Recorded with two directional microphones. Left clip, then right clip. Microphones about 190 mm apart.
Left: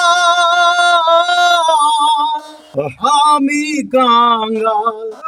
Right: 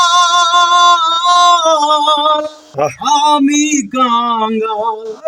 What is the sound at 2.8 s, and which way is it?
Speech, 20° left (ahead or behind).